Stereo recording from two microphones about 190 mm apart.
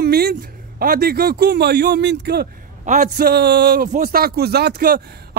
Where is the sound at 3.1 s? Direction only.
55° right (ahead or behind).